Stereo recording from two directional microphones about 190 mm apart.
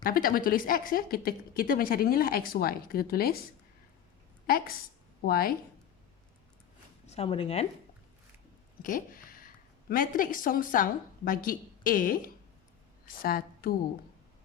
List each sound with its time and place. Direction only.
0.0 s a woman's voice: 50° left (ahead or behind)
4.4 s a woman's voice: 50° left (ahead or behind)
7.1 s speech: 30° left (ahead or behind)
8.8 s a sound: 45° left (ahead or behind)
9.9 s a woman's voice: 45° left (ahead or behind)